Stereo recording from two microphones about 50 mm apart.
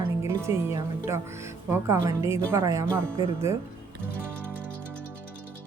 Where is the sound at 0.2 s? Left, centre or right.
Right.